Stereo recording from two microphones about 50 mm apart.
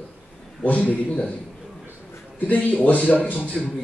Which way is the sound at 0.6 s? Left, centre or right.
Left.